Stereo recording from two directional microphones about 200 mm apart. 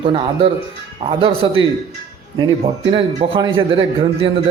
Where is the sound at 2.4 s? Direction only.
30° right (ahead or behind).